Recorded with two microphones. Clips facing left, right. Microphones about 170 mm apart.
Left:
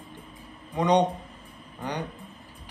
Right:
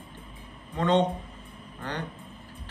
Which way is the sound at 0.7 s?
15° left (ahead or behind).